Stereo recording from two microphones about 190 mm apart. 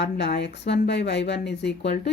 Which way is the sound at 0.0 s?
65° left (ahead or behind).